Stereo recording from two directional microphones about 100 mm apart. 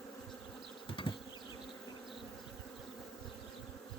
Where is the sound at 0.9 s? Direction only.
60° left (ahead or behind).